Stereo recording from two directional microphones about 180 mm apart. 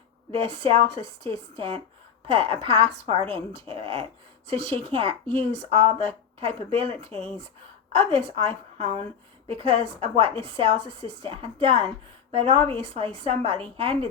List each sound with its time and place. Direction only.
0.3 s a woman's voice: 30° right (ahead or behind)